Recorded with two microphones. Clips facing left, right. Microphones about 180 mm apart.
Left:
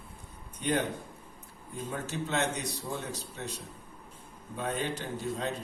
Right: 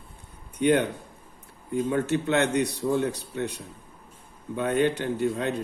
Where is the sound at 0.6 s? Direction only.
65° right (ahead or behind).